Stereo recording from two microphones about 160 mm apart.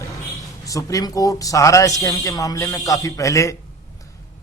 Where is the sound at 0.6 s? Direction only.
20° left (ahead or behind).